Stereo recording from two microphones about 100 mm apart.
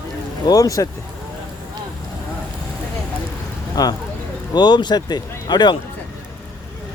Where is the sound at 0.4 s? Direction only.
35° left (ahead or behind).